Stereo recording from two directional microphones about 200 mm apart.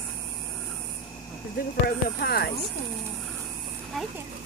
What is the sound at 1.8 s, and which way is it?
Speech, 50° left (ahead or behind).